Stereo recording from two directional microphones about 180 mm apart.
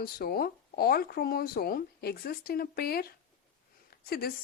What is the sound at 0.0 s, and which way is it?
Speech, 55° left (ahead or behind).